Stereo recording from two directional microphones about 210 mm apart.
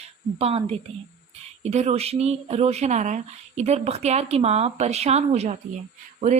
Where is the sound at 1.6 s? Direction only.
30° right (ahead or behind).